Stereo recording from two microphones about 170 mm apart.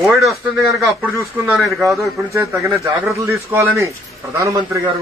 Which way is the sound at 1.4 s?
15° right (ahead or behind).